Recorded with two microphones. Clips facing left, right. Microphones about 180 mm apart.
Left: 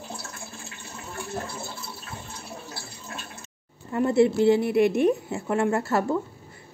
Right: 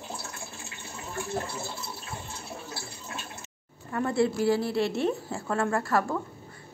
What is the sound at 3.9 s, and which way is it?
A woman's voice, 20° left (ahead or behind).